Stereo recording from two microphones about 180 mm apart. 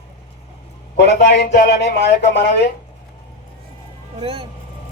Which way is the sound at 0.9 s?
70° left (ahead or behind).